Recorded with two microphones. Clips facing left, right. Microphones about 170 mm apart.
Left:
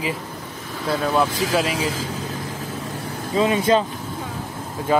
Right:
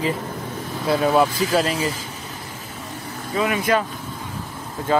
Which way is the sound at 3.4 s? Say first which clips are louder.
Left 3 dB; 25° left (ahead or behind).